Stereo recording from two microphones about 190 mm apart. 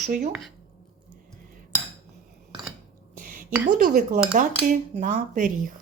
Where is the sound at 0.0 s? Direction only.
40° right (ahead or behind).